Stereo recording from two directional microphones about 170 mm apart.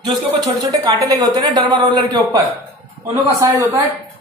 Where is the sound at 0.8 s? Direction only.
20° right (ahead or behind).